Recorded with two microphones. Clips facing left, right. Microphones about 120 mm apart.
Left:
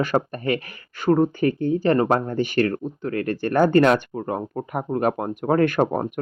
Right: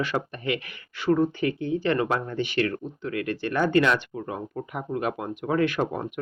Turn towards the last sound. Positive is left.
turn(degrees=45)  # may be behind; listen again after turning